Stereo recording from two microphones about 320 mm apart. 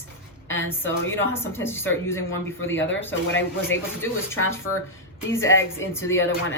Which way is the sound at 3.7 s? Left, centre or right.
Centre.